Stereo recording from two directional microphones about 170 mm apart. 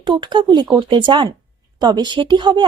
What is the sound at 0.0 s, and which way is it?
A woman's voice, 25° right (ahead or behind).